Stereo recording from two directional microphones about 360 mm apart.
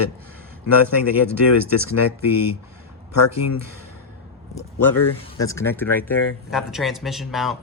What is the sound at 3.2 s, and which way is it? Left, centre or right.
Speech, left.